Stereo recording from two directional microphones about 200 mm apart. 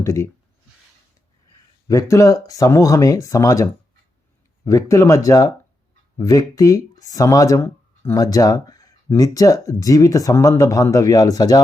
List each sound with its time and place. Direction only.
0.0 s speech: 15° left (ahead or behind)
1.9 s speech: 15° left (ahead or behind)